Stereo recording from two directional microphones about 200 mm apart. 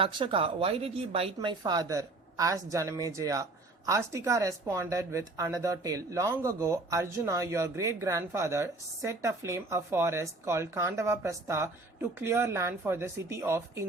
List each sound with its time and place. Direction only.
0.0 s speech: 25° right (ahead or behind)